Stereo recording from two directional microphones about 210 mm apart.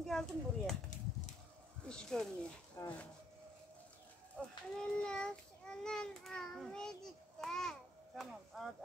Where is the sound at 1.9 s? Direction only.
5° left (ahead or behind).